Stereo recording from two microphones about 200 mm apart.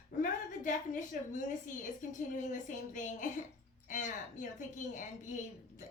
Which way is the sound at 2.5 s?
40° left (ahead or behind).